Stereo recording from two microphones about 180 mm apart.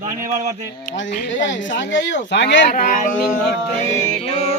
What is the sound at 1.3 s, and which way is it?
Speech, 90° left.